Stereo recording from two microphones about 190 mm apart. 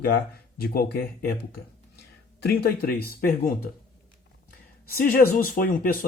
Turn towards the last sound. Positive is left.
turn(degrees=45)  # may be behind; listen again after turning